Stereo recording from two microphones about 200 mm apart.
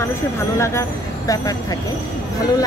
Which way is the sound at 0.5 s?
15° left (ahead or behind).